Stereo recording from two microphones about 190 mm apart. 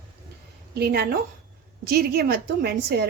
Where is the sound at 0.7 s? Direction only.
55° right (ahead or behind).